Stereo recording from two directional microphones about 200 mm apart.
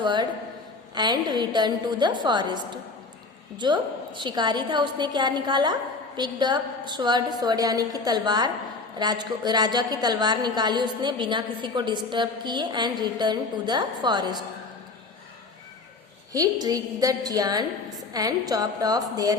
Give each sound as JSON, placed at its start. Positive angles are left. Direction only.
{"t": 0.0, "sound": "a woman's voice", "side_deg": -20}
{"t": 3.6, "sound": "a woman's voice", "side_deg": -25}
{"t": 16.3, "sound": "a woman's voice", "side_deg": -20}